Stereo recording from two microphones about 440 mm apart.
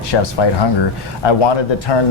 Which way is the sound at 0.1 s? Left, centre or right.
Left.